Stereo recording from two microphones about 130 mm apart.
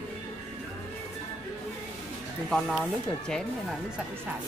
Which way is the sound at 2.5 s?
5° left (ahead or behind).